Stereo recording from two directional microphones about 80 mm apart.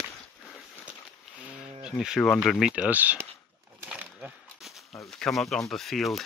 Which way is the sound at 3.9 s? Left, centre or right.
Centre.